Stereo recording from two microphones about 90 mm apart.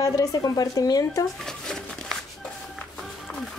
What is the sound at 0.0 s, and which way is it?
Speech, 40° left (ahead or behind).